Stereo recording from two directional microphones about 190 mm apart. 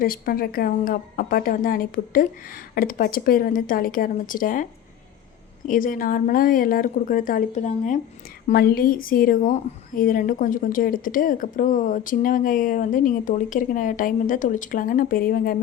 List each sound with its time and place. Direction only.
0.0 s a woman's voice: 50° left (ahead or behind)
5.6 s a woman's voice: 45° left (ahead or behind)
8.5 s a woman's voice: 55° left (ahead or behind)